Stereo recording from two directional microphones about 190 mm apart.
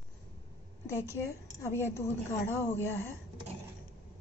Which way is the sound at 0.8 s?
15° left (ahead or behind).